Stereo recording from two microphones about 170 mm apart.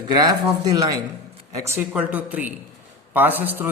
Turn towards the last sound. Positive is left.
turn(degrees=-10)  # may be behind; listen again after turning